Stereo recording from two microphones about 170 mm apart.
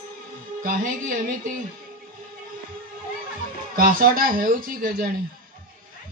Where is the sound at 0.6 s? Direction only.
55° right (ahead or behind).